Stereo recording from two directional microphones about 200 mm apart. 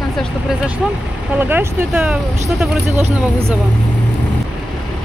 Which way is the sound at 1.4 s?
10° right (ahead or behind).